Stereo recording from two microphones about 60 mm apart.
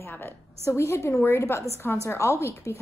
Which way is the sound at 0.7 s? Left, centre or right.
Left.